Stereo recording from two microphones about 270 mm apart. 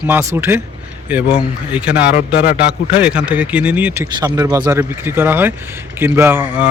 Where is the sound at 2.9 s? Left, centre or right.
Centre.